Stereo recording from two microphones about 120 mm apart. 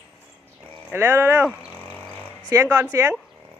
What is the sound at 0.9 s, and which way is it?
Speech, 20° right (ahead or behind).